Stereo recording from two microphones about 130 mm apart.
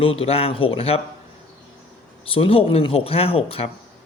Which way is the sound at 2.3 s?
45° left (ahead or behind).